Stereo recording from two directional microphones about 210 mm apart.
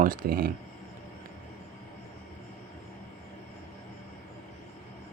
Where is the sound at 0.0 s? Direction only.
40° right (ahead or behind).